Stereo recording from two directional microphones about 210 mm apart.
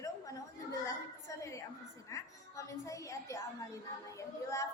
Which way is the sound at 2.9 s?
15° left (ahead or behind).